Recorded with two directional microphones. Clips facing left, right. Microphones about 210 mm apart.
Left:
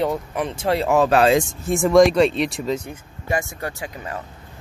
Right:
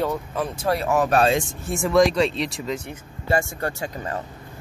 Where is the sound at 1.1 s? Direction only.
90° left.